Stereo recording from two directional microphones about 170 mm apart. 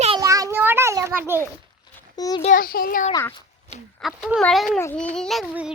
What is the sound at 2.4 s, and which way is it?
Speech, 55° left (ahead or behind).